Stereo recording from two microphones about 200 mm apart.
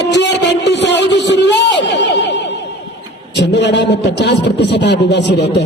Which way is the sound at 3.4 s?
60° left (ahead or behind).